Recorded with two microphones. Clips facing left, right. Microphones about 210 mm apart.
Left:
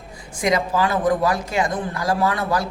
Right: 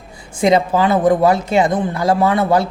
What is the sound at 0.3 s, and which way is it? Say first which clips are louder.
Speech: right 6 dB; 25° right (ahead or behind).